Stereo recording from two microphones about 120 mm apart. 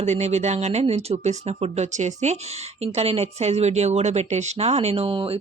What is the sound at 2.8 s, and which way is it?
Speech, 60° right (ahead or behind).